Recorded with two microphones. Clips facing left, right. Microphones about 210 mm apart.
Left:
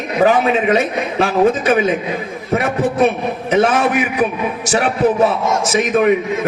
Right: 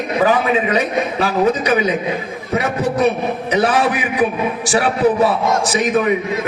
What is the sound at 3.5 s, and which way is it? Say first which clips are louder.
A man's voice: left 3 dB; 45° left (ahead or behind).